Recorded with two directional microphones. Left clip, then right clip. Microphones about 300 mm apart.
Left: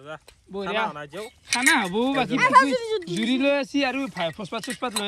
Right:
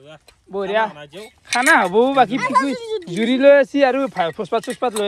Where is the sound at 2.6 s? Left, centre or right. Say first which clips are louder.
Right 1 dB; centre.